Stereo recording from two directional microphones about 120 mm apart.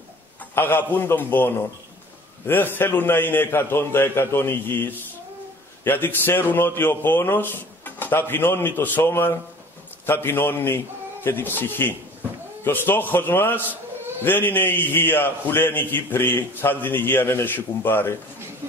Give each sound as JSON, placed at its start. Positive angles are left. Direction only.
{"t": 0.6, "sound": "a man's voice", "side_deg": 15}